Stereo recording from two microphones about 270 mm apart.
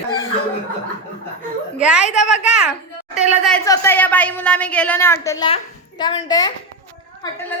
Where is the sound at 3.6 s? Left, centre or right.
Centre.